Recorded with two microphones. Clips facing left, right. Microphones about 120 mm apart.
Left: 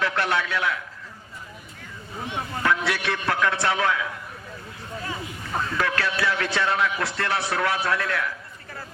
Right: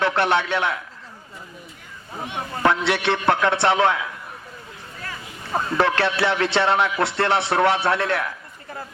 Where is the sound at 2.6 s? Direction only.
30° right (ahead or behind).